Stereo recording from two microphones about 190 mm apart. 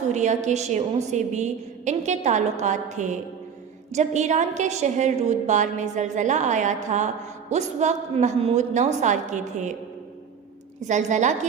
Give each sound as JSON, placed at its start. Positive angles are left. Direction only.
{"t": 0.1, "sound": "a woman's voice", "side_deg": -40}
{"t": 10.8, "sound": "a woman's voice", "side_deg": -40}